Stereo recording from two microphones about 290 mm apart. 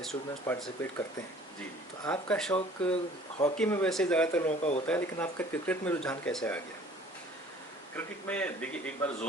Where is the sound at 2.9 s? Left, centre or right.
Centre.